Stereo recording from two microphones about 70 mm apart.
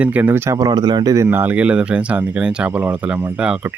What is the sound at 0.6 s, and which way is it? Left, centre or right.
Speech, right.